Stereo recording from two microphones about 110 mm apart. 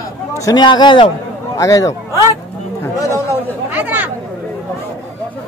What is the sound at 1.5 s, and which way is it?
Speech, 30° left (ahead or behind).